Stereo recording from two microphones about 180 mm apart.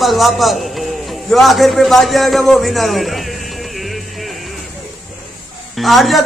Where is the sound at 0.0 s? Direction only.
Centre (ahead or behind).